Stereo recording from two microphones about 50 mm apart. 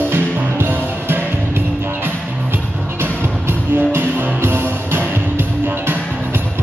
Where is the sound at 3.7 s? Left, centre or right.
Right.